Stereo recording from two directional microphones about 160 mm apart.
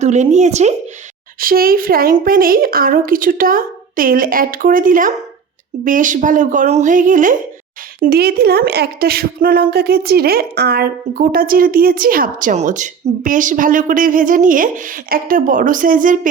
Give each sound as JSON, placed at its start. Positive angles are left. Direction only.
{"t": 0.0, "sound": "speech", "side_deg": -45}
{"t": 1.4, "sound": "a woman's voice", "side_deg": -65}
{"t": 8.0, "sound": "a woman's voice", "side_deg": -70}